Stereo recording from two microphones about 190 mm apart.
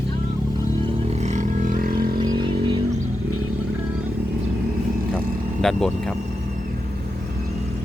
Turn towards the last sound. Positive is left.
turn(degrees=0)  # may be behind; listen again after turning